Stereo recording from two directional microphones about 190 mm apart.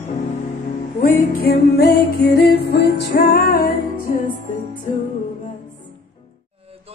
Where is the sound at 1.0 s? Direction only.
50° left (ahead or behind).